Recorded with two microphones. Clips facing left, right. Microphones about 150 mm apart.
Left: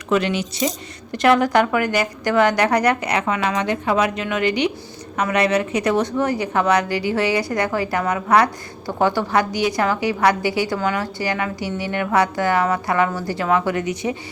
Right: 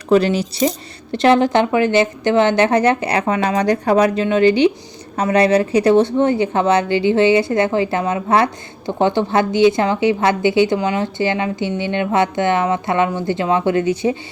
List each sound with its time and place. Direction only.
0.1 s a woman's voice: 35° right (ahead or behind)